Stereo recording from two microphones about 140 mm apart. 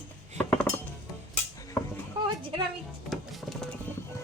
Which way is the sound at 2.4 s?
40° right (ahead or behind).